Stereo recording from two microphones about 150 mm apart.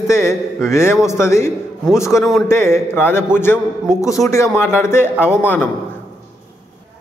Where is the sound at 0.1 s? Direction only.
20° left (ahead or behind).